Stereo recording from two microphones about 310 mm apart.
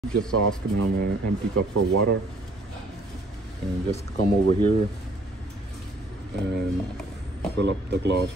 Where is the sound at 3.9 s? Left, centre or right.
Left.